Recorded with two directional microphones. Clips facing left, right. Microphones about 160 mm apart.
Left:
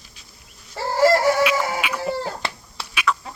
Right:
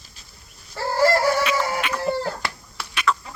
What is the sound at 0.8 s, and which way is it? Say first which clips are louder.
Crowing: left 2 dB; 20° left (ahead or behind).